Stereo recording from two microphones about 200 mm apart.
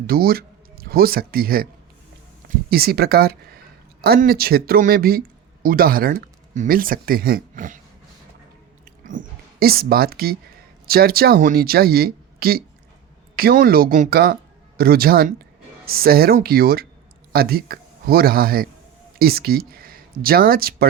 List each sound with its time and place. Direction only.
0.1 s speech: 50° right (ahead or behind)
2.6 s speech: 50° right (ahead or behind)
8.8 s a sound: 45° right (ahead or behind)
10.8 s speech: 50° right (ahead or behind)